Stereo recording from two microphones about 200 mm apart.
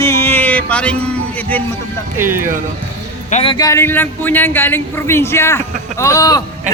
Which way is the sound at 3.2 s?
35° left (ahead or behind).